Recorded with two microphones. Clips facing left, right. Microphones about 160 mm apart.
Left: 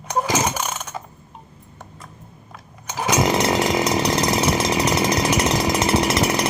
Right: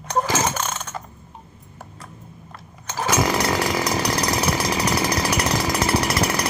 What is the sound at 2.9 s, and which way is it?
Chainsaw, 15° left (ahead or behind).